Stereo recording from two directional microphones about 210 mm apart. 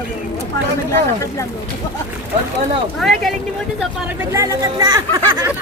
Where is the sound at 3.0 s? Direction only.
Centre (ahead or behind).